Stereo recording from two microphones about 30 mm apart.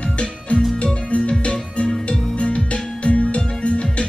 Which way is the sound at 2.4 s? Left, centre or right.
Left.